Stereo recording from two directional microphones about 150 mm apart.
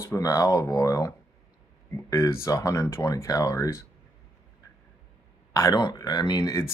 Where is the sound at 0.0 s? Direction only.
20° left (ahead or behind).